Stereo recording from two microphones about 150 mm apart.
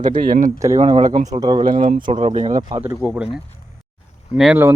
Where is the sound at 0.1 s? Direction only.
65° right (ahead or behind).